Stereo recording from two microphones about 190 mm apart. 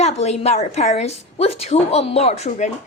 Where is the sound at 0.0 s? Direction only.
35° left (ahead or behind).